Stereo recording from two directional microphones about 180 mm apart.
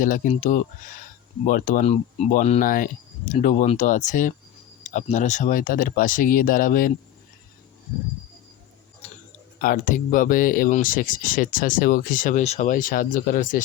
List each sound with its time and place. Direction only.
0.0 s speech: 45° left (ahead or behind)
9.6 s speech: 50° left (ahead or behind)